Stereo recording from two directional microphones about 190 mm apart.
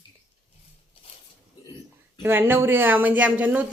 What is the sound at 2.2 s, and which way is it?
Speech, 10° right (ahead or behind).